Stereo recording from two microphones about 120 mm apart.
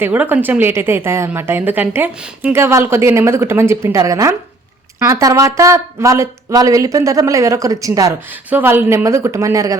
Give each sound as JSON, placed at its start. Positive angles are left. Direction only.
{"t": 0.0, "sound": "a woman's voice", "side_deg": -15}
{"t": 8.4, "sound": "a woman's voice", "side_deg": -15}